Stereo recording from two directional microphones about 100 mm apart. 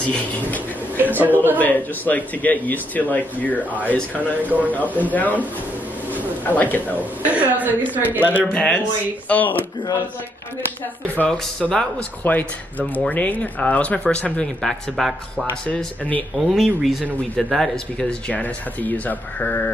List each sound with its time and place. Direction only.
0.0 s speech: 15° left (ahead or behind)
1.1 s a man's voice: 20° right (ahead or behind)
1.6 s speech: 15° left (ahead or behind)
4.4 s a woman's voice: 15° right (ahead or behind)
5.1 s speech: 15° left (ahead or behind)
6.4 s speech: 15° left (ahead or behind)
7.0 s a woman's voice: 15° right (ahead or behind)
8.5 s speech: 10° left (ahead or behind)
11.1 s speech: 10° left (ahead or behind)
16.3 s speech: centre (ahead or behind)
18.3 s speech: 15° left (ahead or behind)